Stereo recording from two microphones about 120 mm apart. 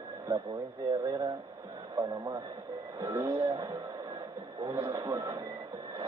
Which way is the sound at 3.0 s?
25° right (ahead or behind).